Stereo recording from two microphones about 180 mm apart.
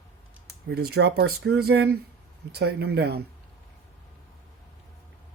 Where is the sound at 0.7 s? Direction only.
60° right (ahead or behind).